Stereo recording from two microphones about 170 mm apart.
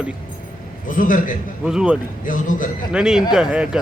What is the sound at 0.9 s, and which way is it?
Speech, 50° left (ahead or behind).